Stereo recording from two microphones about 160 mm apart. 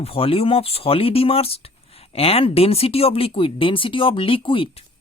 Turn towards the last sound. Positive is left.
turn(degrees=35)  # may be behind; listen again after turning